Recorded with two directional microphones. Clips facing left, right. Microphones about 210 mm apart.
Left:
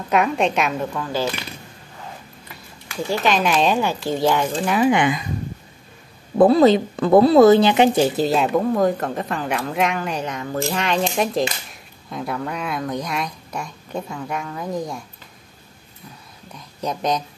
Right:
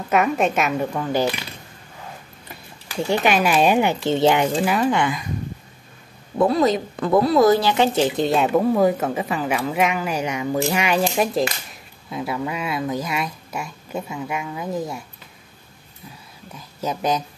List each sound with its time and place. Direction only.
0.1 s speech: 5° right (ahead or behind)
0.9 s speech: 15° right (ahead or behind)
3.3 s speech: 10° right (ahead or behind)
4.8 s speech: 20° left (ahead or behind)
6.4 s speech: 30° left (ahead or behind); by 15.0 s 5° right (ahead or behind)
16.5 s speech: 5° right (ahead or behind)